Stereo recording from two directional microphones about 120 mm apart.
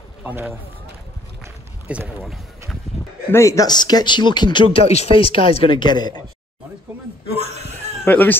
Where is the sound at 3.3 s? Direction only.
25° left (ahead or behind).